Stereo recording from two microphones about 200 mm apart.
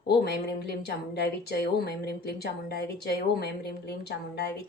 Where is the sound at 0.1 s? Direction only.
55° left (ahead or behind).